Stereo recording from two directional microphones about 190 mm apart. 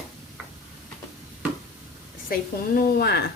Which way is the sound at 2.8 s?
55° left (ahead or behind).